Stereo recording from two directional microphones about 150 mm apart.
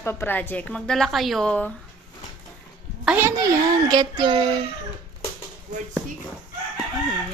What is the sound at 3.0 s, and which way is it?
Speech, 15° right (ahead or behind).